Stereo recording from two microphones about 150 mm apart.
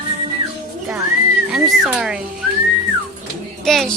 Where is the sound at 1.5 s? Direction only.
5° right (ahead or behind).